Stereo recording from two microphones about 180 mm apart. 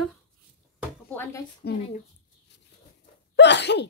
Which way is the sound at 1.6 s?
70° left (ahead or behind).